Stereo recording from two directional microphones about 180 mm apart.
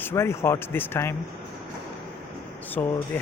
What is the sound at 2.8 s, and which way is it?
Speech, 10° left (ahead or behind).